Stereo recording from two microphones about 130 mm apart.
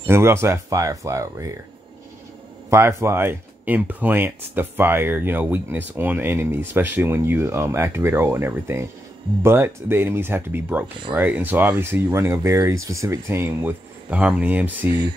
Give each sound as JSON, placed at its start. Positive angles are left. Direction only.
{"t": 0.0, "sound": "speech", "side_deg": -20}
{"t": 2.7, "sound": "speech", "side_deg": -20}